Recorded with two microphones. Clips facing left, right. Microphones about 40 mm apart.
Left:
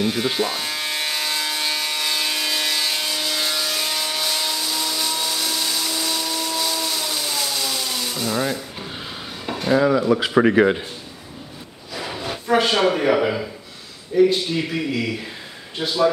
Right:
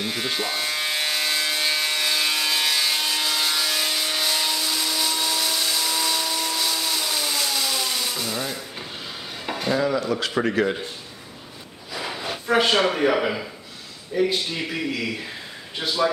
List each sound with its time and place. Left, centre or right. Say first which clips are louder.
0.0 s electric toothbrush: left 5 dB; centre
9.5 s stir: left 4 dB; centre
9.8 s speech: left 7 dB; centre
11.9 s drawer open or close: left 1 dB; centre
14.1 s speech: left 6 dB; centre